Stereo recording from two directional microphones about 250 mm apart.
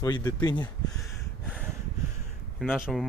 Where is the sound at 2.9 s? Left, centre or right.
Centre.